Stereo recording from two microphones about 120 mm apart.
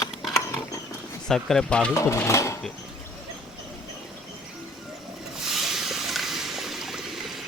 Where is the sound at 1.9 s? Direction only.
25° left (ahead or behind).